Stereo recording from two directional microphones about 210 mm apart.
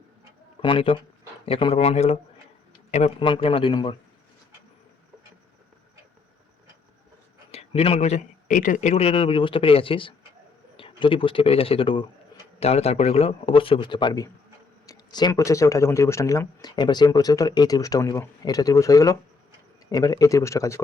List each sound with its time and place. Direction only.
0.6 s a man's voice: 25° left (ahead or behind)
7.5 s a man's voice: 30° left (ahead or behind); by 20.8 s 15° left (ahead or behind)